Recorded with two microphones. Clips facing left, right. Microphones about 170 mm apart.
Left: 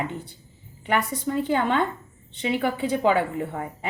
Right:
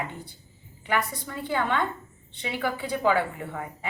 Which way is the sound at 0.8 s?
25° left (ahead or behind).